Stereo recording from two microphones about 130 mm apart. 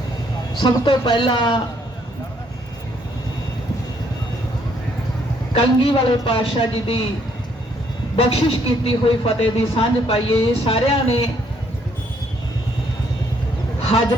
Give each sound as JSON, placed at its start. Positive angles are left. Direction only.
{"t": 0.6, "sound": "a man's voice", "side_deg": 35}
{"t": 5.5, "sound": "a man's voice", "side_deg": 40}
{"t": 8.1, "sound": "speech", "side_deg": 45}